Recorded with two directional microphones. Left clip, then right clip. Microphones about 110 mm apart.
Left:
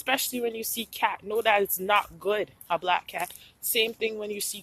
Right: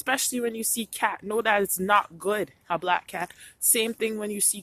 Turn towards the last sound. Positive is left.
turn(degrees=-75)  # may be behind; listen again after turning